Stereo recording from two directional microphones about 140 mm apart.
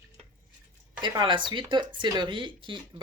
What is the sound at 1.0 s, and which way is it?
Speech, 35° right (ahead or behind).